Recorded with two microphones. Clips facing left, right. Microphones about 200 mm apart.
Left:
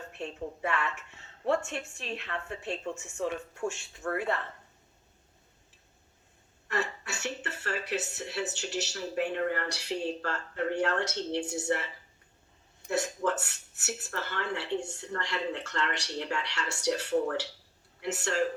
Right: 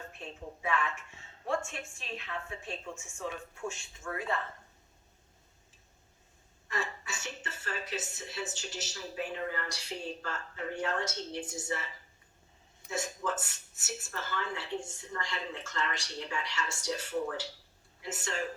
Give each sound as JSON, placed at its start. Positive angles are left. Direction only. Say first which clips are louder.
{"t": 0.2, "sound": "a woman's voice", "louder": "left 8 dB", "side_deg": 70}
{"t": 6.7, "sound": "a woman's voice", "louder": "left 4 dB", "side_deg": 70}
{"t": 12.9, "sound": "a woman's voice", "louder": "left 5 dB", "side_deg": 70}